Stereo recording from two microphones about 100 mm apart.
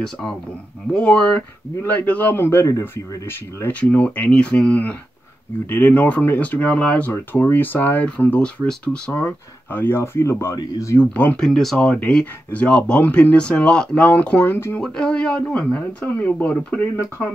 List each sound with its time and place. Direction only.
0.9 s speech: 10° left (ahead or behind); by 11.0 s 30° left (ahead or behind)
11.0 s speech: 15° left (ahead or behind)
11.4 s speech: 5° left (ahead or behind)
14.8 s speech: 10° left (ahead or behind)